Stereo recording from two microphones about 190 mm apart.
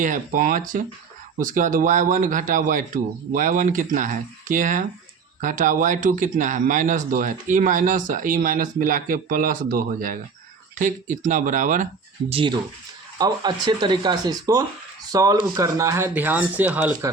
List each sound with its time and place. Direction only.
0.0 s speech: 45° right (ahead or behind)
12.3 s speech: 25° right (ahead or behind); by 17.1 s 10° right (ahead or behind)